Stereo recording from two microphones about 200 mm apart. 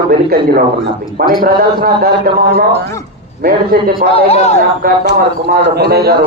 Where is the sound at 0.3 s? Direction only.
50° right (ahead or behind).